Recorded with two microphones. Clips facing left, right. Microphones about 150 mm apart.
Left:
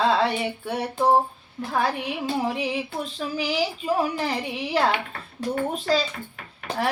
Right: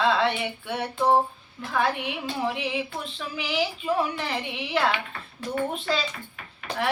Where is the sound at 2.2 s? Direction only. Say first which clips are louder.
Left 4 dB; 40° left (ahead or behind).